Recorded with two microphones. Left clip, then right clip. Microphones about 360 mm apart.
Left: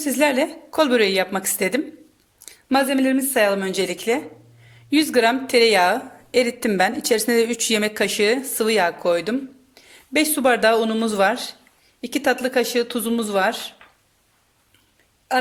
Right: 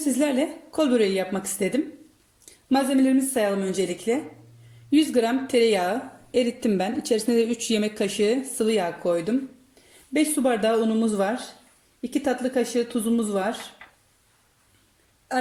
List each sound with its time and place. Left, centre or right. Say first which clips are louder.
0.2 s speech: left 9 dB; left